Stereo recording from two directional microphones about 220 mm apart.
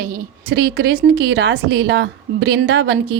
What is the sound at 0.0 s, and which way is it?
A woman's voice, 40° right (ahead or behind).